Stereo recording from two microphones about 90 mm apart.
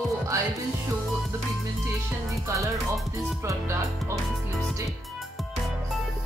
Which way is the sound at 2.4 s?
35° right (ahead or behind).